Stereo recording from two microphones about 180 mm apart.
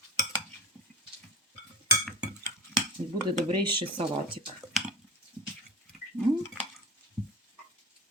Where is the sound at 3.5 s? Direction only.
25° right (ahead or behind).